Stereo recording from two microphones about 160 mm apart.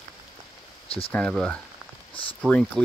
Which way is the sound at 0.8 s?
35° left (ahead or behind).